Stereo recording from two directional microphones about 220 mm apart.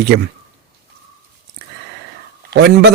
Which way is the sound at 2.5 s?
50° right (ahead or behind).